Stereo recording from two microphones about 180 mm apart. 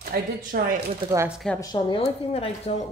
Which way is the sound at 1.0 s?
20° right (ahead or behind).